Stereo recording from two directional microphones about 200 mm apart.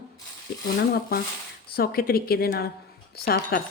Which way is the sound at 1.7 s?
50° left (ahead or behind).